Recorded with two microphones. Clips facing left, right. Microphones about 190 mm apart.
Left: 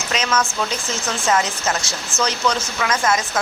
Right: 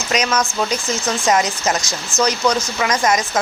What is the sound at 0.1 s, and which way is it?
Speech, 15° right (ahead or behind).